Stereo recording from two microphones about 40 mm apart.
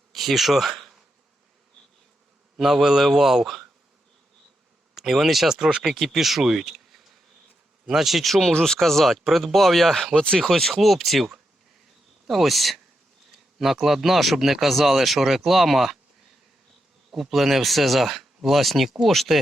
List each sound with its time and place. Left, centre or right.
0.1 s insect: centre
2.6 s speech: centre
4.9 s speech: centre
6.0 s speech: centre
12.3 s speech: centre
17.1 s speech: centre